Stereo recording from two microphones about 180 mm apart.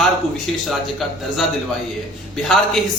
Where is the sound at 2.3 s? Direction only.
Centre (ahead or behind).